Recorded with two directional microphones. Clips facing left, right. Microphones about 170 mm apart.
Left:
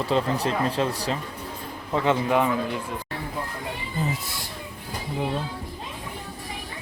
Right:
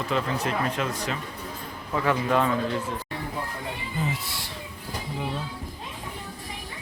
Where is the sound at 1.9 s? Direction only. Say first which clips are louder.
Left 2 dB; 20° left (ahead or behind).